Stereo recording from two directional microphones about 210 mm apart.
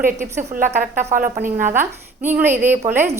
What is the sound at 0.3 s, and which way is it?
A woman's voice, 40° right (ahead or behind).